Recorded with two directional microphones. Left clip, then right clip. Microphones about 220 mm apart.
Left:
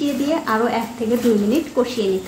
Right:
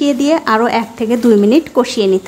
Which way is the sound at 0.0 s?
35° right (ahead or behind).